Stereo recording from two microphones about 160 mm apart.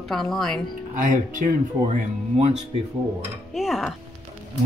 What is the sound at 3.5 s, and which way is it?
Speech, centre (ahead or behind).